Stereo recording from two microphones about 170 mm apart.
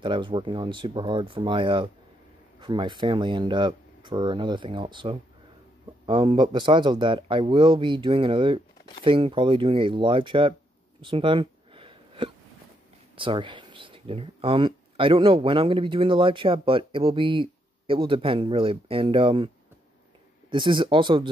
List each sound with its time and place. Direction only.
0.0 s speech: 30° right (ahead or behind)
11.0 s a sound: 30° right (ahead or behind)
13.1 s speech: 30° right (ahead or behind)